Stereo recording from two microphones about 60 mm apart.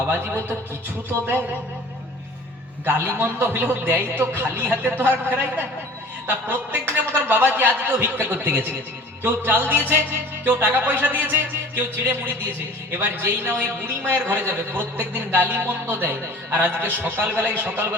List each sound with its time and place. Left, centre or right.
2.8 s a man's voice: right